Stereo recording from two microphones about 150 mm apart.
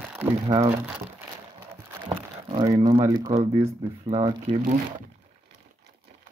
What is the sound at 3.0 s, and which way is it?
Speech, 25° right (ahead or behind).